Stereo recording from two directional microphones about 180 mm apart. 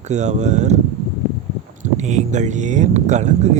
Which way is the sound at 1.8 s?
40° right (ahead or behind).